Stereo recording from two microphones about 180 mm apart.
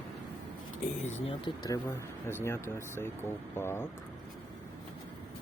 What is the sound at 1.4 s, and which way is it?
Speech, 25° left (ahead or behind).